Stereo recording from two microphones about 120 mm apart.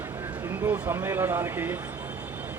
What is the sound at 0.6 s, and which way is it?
Speech, 15° right (ahead or behind).